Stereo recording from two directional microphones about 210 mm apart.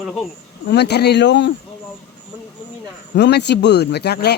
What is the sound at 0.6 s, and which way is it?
Speech, 55° left (ahead or behind).